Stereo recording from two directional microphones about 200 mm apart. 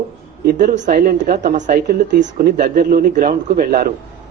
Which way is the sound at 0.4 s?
40° right (ahead or behind).